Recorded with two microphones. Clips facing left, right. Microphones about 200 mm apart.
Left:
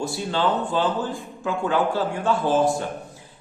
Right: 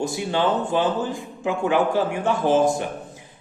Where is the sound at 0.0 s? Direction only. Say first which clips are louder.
Right 1 dB; 20° right (ahead or behind).